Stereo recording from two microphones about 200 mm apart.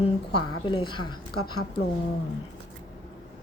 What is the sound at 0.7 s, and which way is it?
Speech, 25° left (ahead or behind).